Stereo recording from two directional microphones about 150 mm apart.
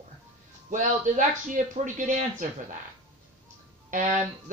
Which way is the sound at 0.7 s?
60° right (ahead or behind).